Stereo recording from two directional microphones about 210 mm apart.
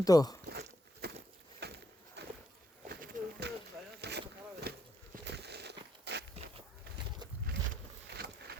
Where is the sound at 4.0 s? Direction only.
50° right (ahead or behind).